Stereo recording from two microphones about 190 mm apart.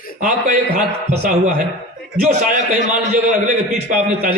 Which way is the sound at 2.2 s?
40° right (ahead or behind).